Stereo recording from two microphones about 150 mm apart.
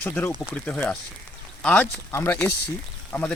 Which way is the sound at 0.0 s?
10° left (ahead or behind).